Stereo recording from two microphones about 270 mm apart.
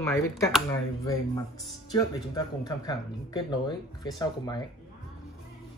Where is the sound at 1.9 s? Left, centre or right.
Centre.